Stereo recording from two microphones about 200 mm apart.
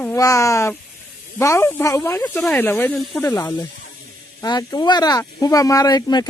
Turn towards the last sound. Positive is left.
turn(degrees=20)  # may be behind; listen again after turning